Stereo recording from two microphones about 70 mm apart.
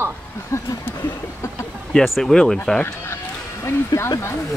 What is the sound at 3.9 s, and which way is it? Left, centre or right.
Speech, left.